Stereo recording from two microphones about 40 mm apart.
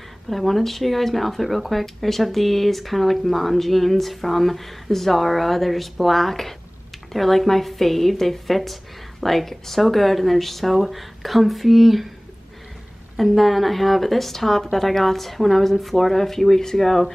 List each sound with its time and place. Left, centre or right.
0.3 s speech: centre
13.1 s speech: centre